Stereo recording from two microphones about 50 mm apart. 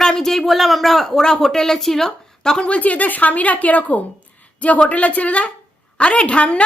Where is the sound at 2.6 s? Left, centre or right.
Left.